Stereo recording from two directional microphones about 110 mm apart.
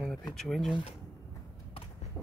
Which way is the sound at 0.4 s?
5° left (ahead or behind).